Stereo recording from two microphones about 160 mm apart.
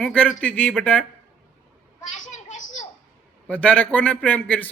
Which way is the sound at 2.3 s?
50° left (ahead or behind).